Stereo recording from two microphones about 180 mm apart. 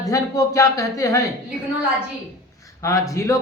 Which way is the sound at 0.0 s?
15° left (ahead or behind).